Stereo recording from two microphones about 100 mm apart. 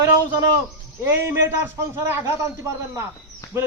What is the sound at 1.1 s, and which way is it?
A man's voice, 25° right (ahead or behind).